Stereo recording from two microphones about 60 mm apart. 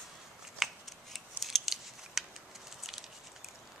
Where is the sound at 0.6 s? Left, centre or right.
Centre.